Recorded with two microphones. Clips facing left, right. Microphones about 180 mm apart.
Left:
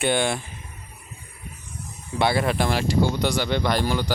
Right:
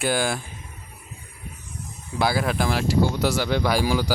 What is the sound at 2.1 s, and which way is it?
Speech, centre (ahead or behind).